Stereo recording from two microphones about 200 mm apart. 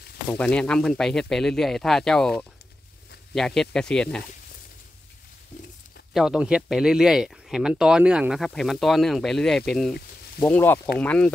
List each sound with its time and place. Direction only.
0.3 s speech: 5° left (ahead or behind)
6.1 s speech: 5° right (ahead or behind)